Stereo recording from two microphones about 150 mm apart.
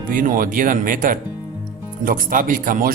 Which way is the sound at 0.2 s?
65° right (ahead or behind).